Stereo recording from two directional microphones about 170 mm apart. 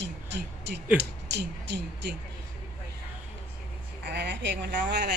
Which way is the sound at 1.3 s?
80° right.